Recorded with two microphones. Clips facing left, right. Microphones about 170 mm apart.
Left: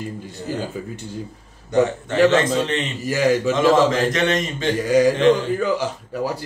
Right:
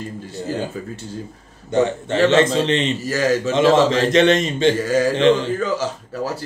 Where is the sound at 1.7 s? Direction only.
25° right (ahead or behind).